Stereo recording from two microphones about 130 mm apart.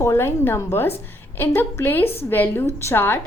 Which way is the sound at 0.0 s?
20° left (ahead or behind).